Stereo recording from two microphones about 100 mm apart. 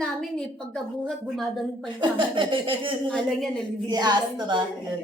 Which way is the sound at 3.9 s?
45° right (ahead or behind).